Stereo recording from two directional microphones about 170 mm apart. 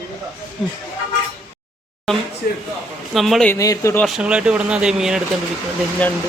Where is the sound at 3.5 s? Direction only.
20° left (ahead or behind).